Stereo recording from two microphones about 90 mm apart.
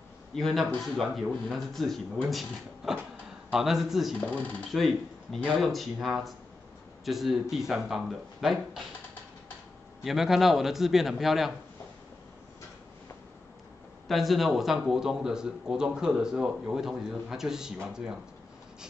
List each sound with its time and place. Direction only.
0.3 s a man's voice: 5° left (ahead or behind)
4.3 s speech: 15° left (ahead or behind)
4.6 s speech: centre (ahead or behind)
10.0 s speech: 5° right (ahead or behind)
14.0 s speech: centre (ahead or behind)